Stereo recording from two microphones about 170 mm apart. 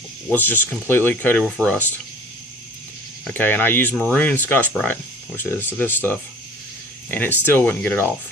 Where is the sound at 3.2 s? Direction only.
10° left (ahead or behind).